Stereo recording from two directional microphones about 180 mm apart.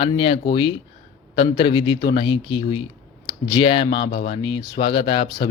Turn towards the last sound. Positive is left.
turn(degrees=30)  # may be behind; listen again after turning